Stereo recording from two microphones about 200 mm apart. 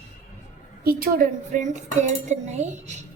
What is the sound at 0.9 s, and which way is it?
Dishes, 45° right (ahead or behind).